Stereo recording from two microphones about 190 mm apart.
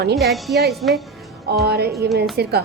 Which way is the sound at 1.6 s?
55° right (ahead or behind).